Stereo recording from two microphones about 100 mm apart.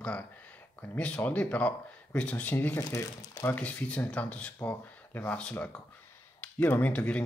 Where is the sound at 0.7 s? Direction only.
15° left (ahead or behind).